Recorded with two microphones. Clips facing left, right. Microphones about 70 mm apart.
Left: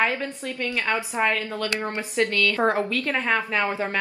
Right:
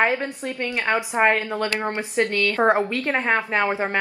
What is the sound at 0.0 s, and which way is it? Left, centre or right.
A woman's voice, right.